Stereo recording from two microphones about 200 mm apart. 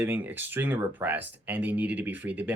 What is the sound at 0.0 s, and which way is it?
Speech, 10° right (ahead or behind).